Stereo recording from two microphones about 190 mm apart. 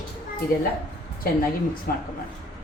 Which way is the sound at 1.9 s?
50° left (ahead or behind).